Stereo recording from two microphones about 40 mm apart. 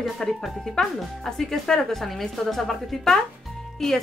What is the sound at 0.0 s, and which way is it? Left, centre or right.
Speech, centre.